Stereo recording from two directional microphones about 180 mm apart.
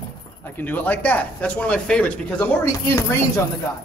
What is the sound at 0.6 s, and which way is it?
Speech, 10° left (ahead or behind).